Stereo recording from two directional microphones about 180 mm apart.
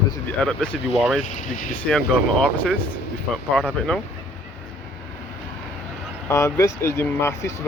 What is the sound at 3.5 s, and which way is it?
Speech, 5° left (ahead or behind).